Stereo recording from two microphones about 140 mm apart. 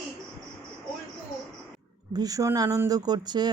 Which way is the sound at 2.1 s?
25° right (ahead or behind).